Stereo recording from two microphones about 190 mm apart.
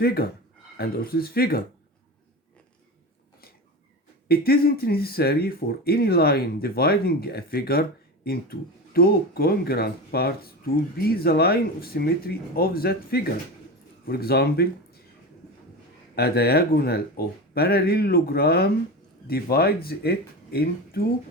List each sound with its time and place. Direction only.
0.0 s speech: 55° left (ahead or behind)
4.3 s speech: 50° left (ahead or behind)
16.1 s speech: 55° left (ahead or behind)